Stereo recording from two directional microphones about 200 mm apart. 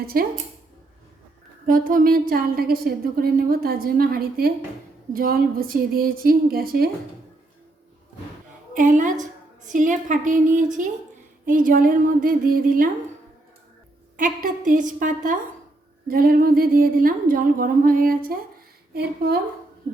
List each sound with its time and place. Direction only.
0.1 s a woman's voice: 45° right (ahead or behind)
1.6 s a woman's voice: 45° right (ahead or behind)
8.7 s a woman's voice: 40° right (ahead or behind)
14.2 s a woman's voice: 40° right (ahead or behind)